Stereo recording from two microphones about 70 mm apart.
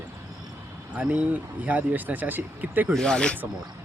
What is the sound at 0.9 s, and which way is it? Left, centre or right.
Speech, centre.